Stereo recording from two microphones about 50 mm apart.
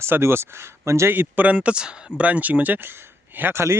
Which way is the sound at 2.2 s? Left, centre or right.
Right.